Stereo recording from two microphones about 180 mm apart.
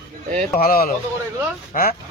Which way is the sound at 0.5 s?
55° left (ahead or behind).